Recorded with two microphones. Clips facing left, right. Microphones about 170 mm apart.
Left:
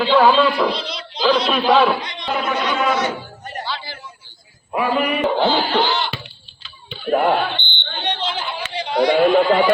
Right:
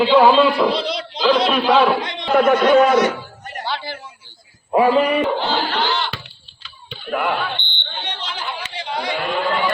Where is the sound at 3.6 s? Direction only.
55° right (ahead or behind).